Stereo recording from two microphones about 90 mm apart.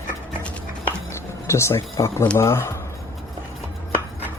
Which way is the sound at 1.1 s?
30° left (ahead or behind).